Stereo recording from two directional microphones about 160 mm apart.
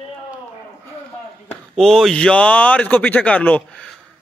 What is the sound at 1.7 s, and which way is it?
Speech, 5° left (ahead or behind).